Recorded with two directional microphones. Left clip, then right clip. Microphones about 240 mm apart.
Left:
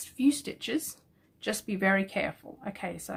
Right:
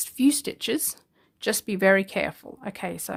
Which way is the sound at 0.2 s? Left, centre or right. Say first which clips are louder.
Right 5 dB; right.